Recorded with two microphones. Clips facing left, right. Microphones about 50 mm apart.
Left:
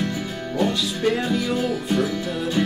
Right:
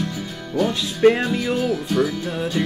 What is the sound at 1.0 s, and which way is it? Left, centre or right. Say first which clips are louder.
Music: right 7 dB; right.